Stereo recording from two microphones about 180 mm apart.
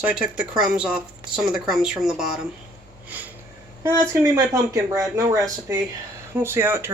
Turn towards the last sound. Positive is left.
turn(degrees=-15)  # may be behind; listen again after turning